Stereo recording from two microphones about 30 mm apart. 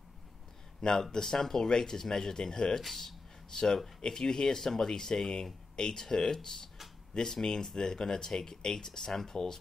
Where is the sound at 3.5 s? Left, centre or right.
Left.